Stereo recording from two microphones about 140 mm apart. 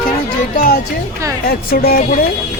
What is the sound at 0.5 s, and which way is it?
Speech, 80° left.